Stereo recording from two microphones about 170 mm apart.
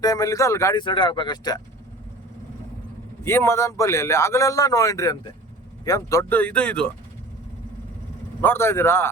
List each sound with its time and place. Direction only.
0.0 s speech: 20° left (ahead or behind)
3.2 s a man's voice: 15° left (ahead or behind)
8.4 s a man's voice: 15° left (ahead or behind)